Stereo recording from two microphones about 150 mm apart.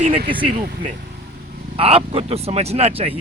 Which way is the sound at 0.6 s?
75° right (ahead or behind).